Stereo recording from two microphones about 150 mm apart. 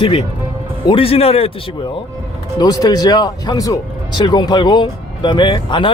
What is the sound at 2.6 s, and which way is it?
Speech, 25° left (ahead or behind).